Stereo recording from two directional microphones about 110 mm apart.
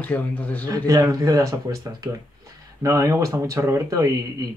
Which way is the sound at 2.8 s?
30° right (ahead or behind).